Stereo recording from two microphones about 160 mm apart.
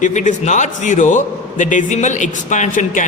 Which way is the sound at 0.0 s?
50° left (ahead or behind).